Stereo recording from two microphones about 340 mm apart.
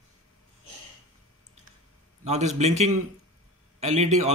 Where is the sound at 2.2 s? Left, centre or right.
Centre.